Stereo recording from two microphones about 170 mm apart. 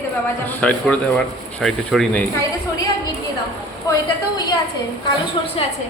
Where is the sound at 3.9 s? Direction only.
20° left (ahead or behind).